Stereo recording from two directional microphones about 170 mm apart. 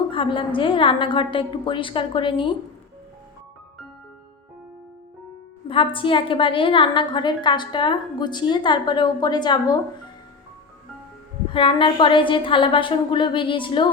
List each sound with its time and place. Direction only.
0.1 s a woman's voice: 30° left (ahead or behind)
5.6 s a woman's voice: 30° left (ahead or behind)
11.5 s a woman's voice: 30° left (ahead or behind)